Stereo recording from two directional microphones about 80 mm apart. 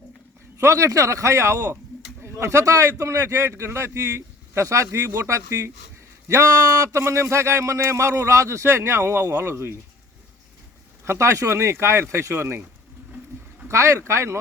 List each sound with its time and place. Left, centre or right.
0.6 s speech: right
11.0 s speech: right
13.7 s speech: right